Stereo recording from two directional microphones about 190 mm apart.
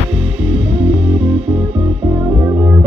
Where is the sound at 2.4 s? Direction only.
15° right (ahead or behind).